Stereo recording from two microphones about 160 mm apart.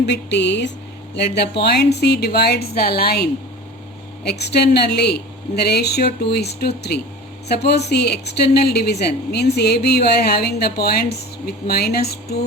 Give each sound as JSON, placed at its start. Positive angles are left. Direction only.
{"t": 0.0, "sound": "speech", "side_deg": 90}
{"t": 4.2, "sound": "speech", "side_deg": 90}